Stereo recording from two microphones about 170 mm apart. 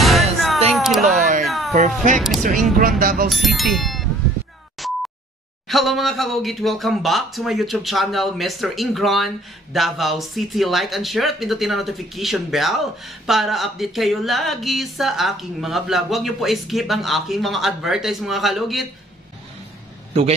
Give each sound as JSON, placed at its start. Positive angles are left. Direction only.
{"t": 0.0, "sound": "music", "side_deg": 0}
{"t": 0.7, "sound": "a sound", "side_deg": 0}
{"t": 2.1, "sound": "speech", "side_deg": 0}
{"t": 2.4, "sound": "speech", "side_deg": -55}
{"t": 3.3, "sound": "speech", "side_deg": 0}
{"t": 4.8, "sound": "a sound", "side_deg": 0}
{"t": 5.7, "sound": "speech", "side_deg": 0}